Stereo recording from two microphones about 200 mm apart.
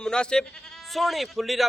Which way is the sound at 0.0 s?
5° left (ahead or behind).